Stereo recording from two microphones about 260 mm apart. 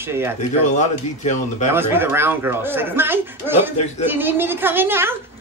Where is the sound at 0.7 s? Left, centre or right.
Left.